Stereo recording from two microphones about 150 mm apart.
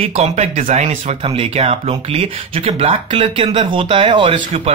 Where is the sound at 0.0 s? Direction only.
45° right (ahead or behind).